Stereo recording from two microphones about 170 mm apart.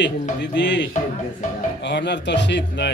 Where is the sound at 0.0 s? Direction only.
90° left.